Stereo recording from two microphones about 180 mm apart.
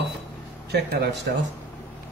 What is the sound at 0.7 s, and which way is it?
Speech, 70° right (ahead or behind).